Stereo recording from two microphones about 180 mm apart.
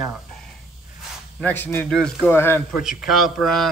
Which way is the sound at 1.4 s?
10° left (ahead or behind).